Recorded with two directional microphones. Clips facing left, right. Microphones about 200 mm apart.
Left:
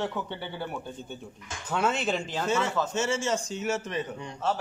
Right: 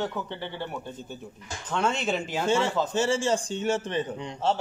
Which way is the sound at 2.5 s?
30° right (ahead or behind).